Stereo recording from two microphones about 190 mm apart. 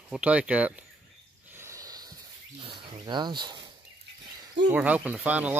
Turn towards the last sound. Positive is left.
turn(degrees=-10)  # may be behind; listen again after turning